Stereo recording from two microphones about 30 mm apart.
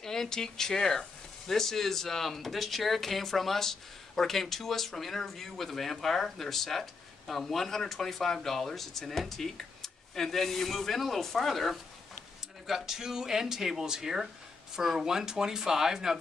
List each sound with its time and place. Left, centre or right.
0.0 s speech: centre
12.6 s speech: centre